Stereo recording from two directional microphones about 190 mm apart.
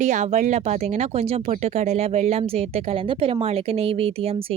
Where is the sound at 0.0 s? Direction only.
40° right (ahead or behind).